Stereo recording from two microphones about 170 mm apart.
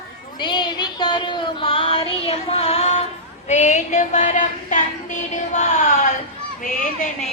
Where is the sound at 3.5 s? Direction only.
45° left (ahead or behind).